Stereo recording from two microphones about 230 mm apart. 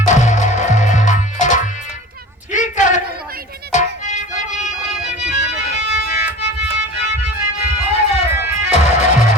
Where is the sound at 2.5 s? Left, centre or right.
Left.